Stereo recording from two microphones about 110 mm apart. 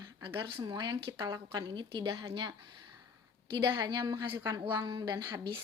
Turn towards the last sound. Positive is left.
turn(degrees=-40)  # may be behind; listen again after turning